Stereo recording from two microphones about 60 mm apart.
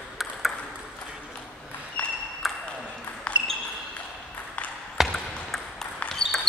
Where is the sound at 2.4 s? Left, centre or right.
Centre.